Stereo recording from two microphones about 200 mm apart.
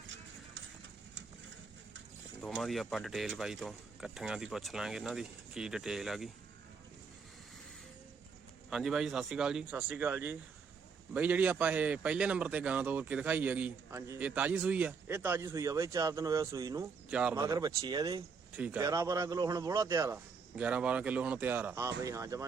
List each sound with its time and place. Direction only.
2.4 s speech: centre (ahead or behind)
8.7 s a man's voice: centre (ahead or behind); by 16.8 s 15° right (ahead or behind)
17.1 s speech: 5° right (ahead or behind)
17.4 s speech: 15° right (ahead or behind)
18.5 s a man's voice: 10° right (ahead or behind)